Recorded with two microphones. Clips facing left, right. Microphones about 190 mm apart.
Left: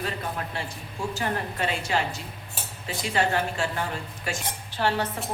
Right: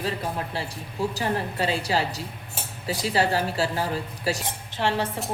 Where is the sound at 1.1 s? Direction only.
30° right (ahead or behind).